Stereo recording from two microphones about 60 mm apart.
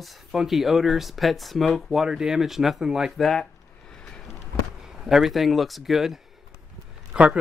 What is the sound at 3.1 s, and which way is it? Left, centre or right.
Speech, centre.